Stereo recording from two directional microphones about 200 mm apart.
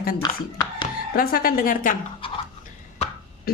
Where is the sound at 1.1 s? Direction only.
45° left (ahead or behind).